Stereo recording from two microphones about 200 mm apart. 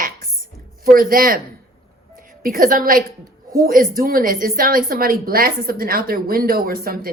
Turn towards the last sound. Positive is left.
turn(degrees=-45)  # may be behind; listen again after turning